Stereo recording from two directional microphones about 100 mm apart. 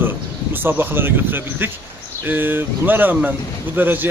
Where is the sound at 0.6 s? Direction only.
20° right (ahead or behind).